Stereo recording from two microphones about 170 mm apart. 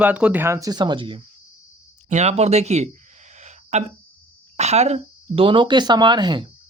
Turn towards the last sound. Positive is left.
turn(degrees=-25)  # may be behind; listen again after turning